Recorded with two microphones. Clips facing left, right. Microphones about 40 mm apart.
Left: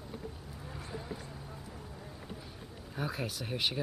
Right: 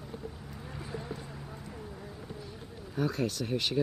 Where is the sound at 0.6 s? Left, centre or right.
Centre.